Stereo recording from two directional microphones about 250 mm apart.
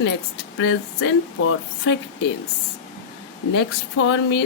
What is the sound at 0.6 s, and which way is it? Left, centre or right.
Speech, left.